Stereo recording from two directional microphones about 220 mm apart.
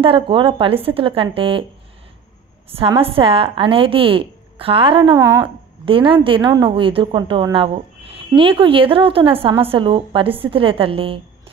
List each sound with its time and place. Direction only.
0.0 s a woman's voice: 25° right (ahead or behind)
2.7 s a woman's voice: 25° right (ahead or behind)
5.2 s speech: 15° right (ahead or behind)
5.9 s a woman's voice: 25° right (ahead or behind)